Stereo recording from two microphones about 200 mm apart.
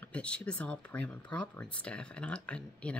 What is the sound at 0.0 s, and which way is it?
Speech, 5° left (ahead or behind).